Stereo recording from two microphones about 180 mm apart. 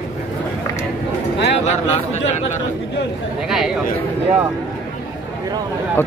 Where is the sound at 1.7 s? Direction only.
40° left (ahead or behind).